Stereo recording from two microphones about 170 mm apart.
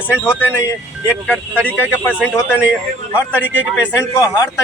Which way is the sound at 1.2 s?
10° left (ahead or behind).